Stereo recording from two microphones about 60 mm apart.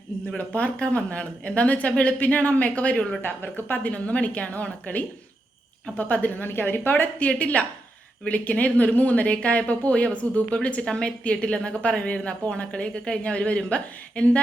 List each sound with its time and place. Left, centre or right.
0.3 s speech: left
3.2 s speech: left
3.9 s speech: left